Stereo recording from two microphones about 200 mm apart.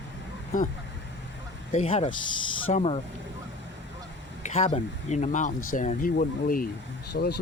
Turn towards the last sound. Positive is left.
turn(degrees=55)  # may be behind; listen again after turning